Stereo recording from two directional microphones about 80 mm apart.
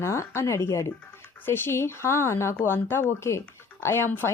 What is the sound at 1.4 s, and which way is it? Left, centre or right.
Speech, left.